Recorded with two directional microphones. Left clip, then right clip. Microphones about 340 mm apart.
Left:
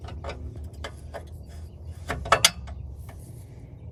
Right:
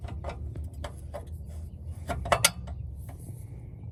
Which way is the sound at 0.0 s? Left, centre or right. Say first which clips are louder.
Left 2 dB; centre.